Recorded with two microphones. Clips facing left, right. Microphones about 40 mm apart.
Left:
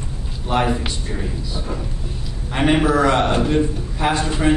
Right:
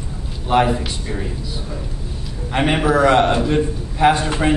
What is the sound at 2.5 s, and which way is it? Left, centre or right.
A man's voice, centre.